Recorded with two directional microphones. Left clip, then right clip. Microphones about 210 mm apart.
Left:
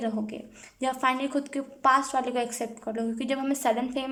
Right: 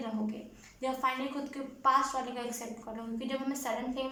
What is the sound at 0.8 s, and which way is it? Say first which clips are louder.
A woman's voice: left 6 dB; 50° left (ahead or behind).